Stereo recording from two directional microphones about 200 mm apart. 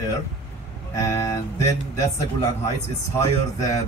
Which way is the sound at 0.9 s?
15° left (ahead or behind).